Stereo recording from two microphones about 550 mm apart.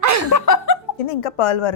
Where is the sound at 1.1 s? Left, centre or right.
Left.